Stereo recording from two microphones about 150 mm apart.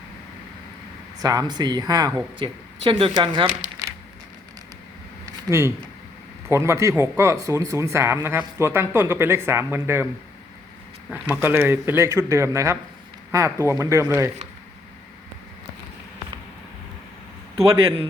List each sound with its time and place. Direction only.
1.2 s speech: 25° right (ahead or behind)
5.2 s a sound: 20° right (ahead or behind)
6.5 s speech: 20° right (ahead or behind)
11.1 s speech: 15° right (ahead or behind)
17.7 s a man's voice: 35° right (ahead or behind)